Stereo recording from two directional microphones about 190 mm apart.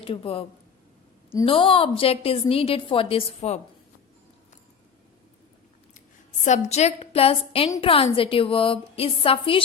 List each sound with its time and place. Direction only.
0.0 s a woman's voice: 30° left (ahead or behind)
1.5 s a woman's voice: 25° left (ahead or behind)
6.4 s a woman's voice: 35° left (ahead or behind)